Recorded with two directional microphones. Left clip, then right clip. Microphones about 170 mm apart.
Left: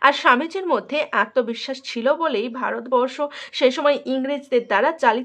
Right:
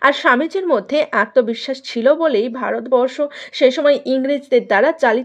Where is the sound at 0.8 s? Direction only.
35° right (ahead or behind).